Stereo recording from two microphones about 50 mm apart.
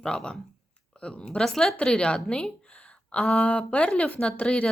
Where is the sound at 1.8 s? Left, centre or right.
Centre.